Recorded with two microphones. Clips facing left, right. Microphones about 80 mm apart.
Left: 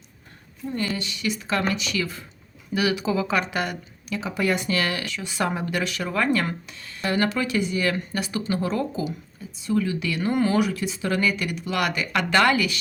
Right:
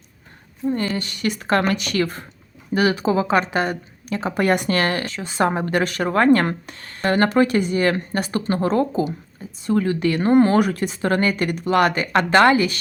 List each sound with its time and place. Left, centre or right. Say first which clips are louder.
0.7 s a woman's voice: right 4 dB; right
2.7 s speech: right 5 dB; right